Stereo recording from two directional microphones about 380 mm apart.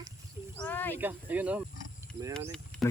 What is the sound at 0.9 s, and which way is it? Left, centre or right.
Speech, centre.